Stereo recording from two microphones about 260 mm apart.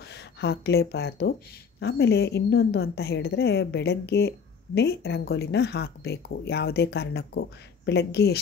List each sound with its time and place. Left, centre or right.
0.1 s a woman's voice: left